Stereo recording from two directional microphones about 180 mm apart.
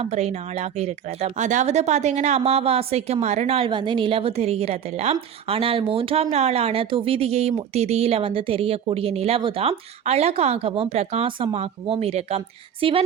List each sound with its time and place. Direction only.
0.0 s speech: 35° right (ahead or behind)